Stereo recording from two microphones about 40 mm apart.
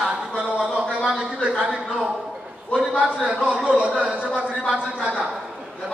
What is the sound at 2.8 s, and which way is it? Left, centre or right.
A man's voice, right.